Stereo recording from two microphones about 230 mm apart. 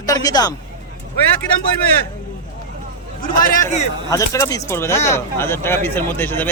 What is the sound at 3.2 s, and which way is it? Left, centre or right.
Speech, left.